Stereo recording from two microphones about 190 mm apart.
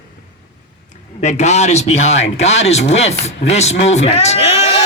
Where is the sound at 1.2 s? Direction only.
35° left (ahead or behind).